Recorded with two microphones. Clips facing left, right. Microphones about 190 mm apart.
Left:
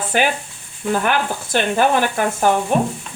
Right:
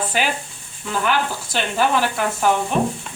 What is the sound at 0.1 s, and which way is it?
Speech, 55° left (ahead or behind).